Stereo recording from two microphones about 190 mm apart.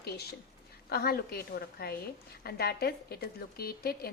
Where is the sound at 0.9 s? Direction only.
55° left (ahead or behind).